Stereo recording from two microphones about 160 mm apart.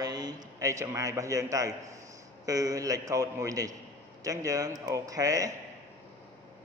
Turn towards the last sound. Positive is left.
turn(degrees=-20)  # may be behind; listen again after turning